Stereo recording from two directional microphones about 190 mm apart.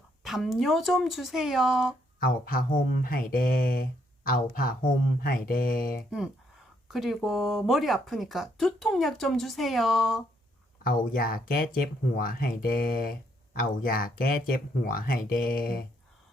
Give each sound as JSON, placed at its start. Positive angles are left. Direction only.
{"t": 0.2, "sound": "speech", "side_deg": 0}
{"t": 2.1, "sound": "speech", "side_deg": 50}
{"t": 6.1, "sound": "speech", "side_deg": -5}
{"t": 10.8, "sound": "speech", "side_deg": 50}